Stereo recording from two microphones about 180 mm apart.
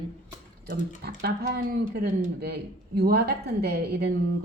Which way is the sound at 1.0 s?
60° right (ahead or behind).